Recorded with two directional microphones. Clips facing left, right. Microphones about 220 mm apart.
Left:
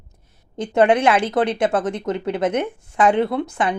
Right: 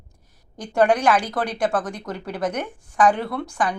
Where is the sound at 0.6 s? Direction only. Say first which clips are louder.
Left 3 dB; 20° left (ahead or behind).